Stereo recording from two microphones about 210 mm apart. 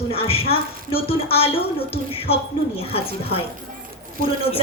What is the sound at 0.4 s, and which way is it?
Speech, 45° left (ahead or behind).